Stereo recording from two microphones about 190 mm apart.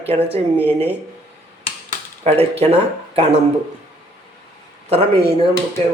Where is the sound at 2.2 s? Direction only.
30° right (ahead or behind).